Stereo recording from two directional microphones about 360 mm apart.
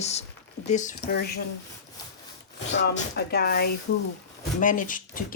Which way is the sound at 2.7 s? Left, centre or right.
Left.